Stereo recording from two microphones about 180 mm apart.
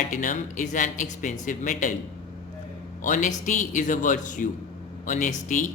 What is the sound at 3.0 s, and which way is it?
Speech, 45° left (ahead or behind).